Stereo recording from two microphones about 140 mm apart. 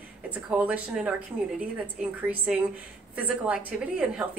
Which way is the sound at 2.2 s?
10° right (ahead or behind).